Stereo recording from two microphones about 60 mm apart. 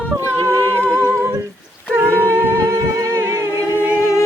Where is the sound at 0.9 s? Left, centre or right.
Right.